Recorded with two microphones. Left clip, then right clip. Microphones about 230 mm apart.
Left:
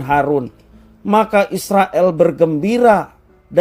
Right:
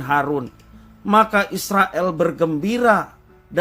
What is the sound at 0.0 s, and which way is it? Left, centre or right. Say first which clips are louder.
A man's voice: left 5 dB; left.